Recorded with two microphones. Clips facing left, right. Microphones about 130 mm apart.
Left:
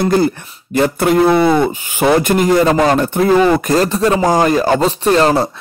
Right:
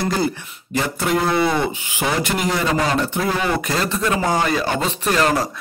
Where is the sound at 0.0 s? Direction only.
55° left (ahead or behind).